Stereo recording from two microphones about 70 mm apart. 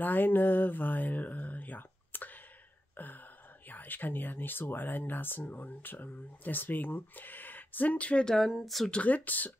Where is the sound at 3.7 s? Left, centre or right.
Left.